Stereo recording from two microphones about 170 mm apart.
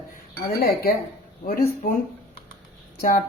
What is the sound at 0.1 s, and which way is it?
A woman's voice, 60° left (ahead or behind).